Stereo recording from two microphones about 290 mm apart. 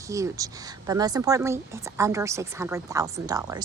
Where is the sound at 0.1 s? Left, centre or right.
Centre.